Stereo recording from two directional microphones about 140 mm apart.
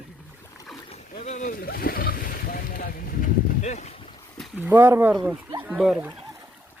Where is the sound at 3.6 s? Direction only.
55° left (ahead or behind).